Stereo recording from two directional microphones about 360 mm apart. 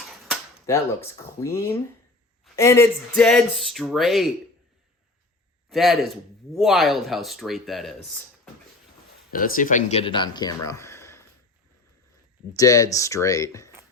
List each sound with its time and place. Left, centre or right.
0.0 s speech: centre
5.6 s a man's voice: centre
9.3 s speech: left
10.7 s a sound: centre
12.5 s speech: centre